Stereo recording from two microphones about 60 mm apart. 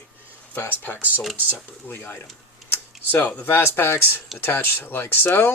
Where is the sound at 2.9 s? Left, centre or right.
Centre.